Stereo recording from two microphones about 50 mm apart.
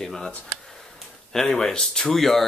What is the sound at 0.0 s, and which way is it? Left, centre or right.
Speech, centre.